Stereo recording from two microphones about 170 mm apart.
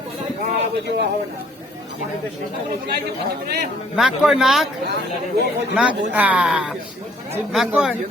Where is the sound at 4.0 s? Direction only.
Centre (ahead or behind).